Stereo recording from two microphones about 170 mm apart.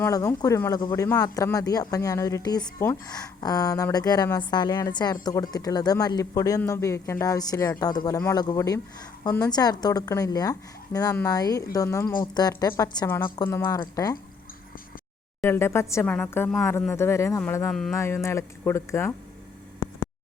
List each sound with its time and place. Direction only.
0.0 s speech: 20° left (ahead or behind)
15.4 s speech: 15° left (ahead or behind)
17.7 s speech: 5° left (ahead or behind)
17.9 s speech: 15° left (ahead or behind)